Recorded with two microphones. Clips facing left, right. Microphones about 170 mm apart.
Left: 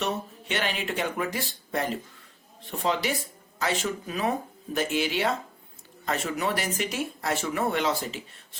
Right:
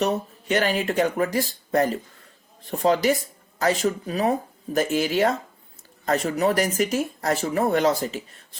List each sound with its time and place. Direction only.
0.0 s speech: 40° right (ahead or behind)